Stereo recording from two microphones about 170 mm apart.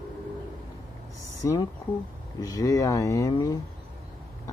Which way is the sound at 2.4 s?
20° left (ahead or behind).